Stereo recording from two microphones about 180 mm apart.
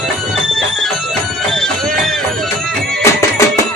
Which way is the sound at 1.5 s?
5° left (ahead or behind).